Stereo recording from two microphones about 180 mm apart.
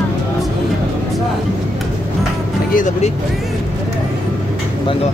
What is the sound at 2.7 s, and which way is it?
Speech, 45° left (ahead or behind).